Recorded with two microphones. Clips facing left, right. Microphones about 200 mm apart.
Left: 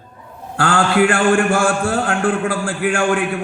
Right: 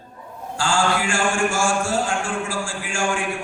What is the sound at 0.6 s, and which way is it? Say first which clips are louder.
A man's voice: left 7 dB; 60° left (ahead or behind).